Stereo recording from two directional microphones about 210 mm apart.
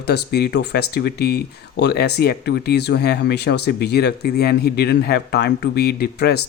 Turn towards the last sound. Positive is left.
turn(degrees=50)  # may be behind; listen again after turning